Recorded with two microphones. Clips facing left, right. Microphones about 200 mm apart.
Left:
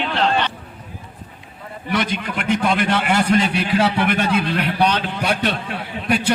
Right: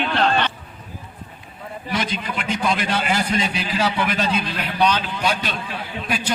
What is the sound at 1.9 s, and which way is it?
A man's voice, 60° left (ahead or behind).